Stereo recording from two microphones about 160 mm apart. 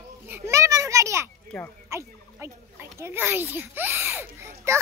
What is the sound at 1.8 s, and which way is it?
Fowl, 15° right (ahead or behind).